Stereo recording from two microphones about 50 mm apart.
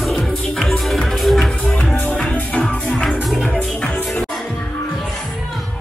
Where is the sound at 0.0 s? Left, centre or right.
Centre.